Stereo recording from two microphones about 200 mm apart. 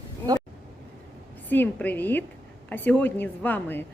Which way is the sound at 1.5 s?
10° left (ahead or behind).